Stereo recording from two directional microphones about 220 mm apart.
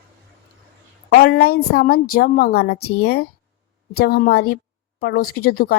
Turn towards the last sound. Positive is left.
turn(degrees=45)  # may be behind; listen again after turning